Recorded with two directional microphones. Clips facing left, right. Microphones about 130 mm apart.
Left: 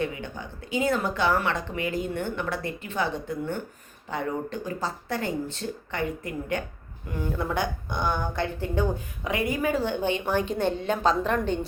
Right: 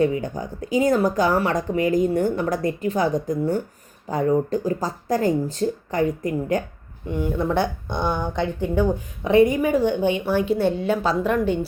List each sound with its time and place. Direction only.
0.0 s speech: 35° right (ahead or behind)
7.2 s speech: 25° right (ahead or behind)
8.1 s speech: 15° right (ahead or behind)
9.2 s speech: 25° right (ahead or behind)